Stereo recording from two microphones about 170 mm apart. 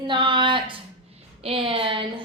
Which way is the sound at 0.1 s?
30° right (ahead or behind).